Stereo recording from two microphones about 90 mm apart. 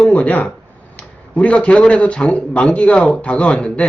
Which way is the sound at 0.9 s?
15° left (ahead or behind).